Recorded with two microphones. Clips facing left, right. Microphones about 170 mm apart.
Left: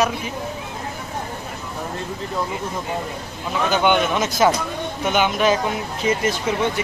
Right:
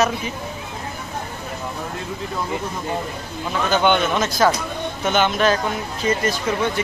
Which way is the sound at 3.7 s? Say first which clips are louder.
Right 1 dB; 10° left (ahead or behind).